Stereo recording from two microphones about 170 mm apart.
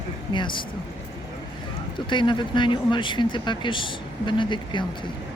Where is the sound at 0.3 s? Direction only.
30° left (ahead or behind).